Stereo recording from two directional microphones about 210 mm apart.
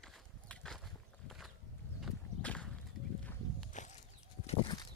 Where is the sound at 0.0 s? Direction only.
Centre (ahead or behind).